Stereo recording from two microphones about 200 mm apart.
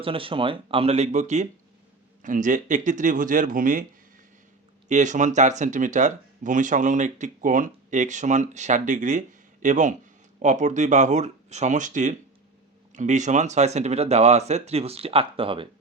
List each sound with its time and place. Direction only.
0.0 s speech: 25° right (ahead or behind); by 3.8 s 45° right (ahead or behind)
4.9 s speech: 35° right (ahead or behind)